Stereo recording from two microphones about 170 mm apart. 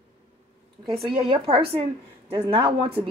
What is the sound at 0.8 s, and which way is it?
A woman's voice, 30° right (ahead or behind).